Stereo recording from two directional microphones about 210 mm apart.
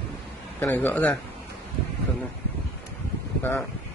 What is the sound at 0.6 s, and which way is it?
Speech, 10° left (ahead or behind).